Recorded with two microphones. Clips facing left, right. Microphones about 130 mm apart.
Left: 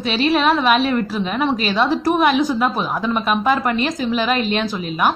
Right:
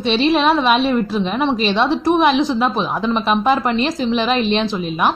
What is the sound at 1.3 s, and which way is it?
A woman's voice, 25° right (ahead or behind).